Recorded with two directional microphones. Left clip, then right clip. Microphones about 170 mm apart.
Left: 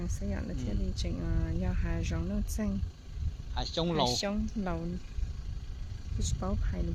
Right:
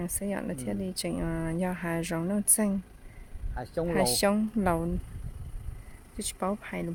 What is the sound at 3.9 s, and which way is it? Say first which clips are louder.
Speech: right 6 dB; 65° right (ahead or behind).